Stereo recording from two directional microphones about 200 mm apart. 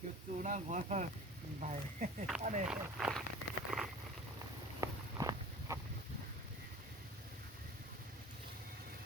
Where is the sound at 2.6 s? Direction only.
5° right (ahead or behind).